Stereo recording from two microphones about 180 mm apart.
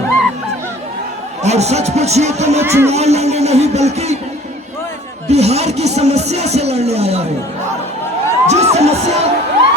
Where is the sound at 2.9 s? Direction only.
35° right (ahead or behind).